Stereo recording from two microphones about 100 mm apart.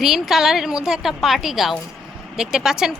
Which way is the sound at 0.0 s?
5° right (ahead or behind).